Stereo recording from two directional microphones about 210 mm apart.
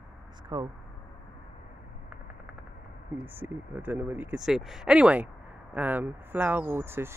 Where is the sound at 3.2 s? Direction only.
10° right (ahead or behind).